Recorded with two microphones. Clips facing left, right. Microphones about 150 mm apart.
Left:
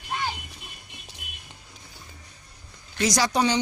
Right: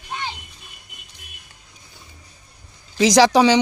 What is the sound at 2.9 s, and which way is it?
Speech, 90° right.